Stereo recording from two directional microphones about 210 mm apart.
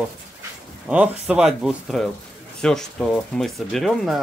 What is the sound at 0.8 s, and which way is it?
Speech, 5° right (ahead or behind).